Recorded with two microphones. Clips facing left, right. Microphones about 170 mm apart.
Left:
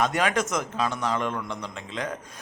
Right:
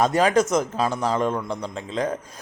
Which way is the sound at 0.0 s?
35° right (ahead or behind).